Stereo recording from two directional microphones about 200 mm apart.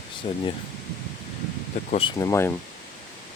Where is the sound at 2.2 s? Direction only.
15° left (ahead or behind).